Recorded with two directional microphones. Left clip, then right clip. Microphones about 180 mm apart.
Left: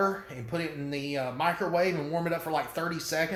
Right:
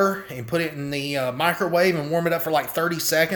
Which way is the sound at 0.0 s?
55° right (ahead or behind).